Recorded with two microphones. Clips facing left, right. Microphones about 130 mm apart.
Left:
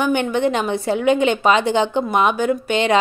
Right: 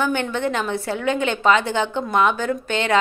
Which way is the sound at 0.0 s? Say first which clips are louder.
Left 4 dB; 15° left (ahead or behind).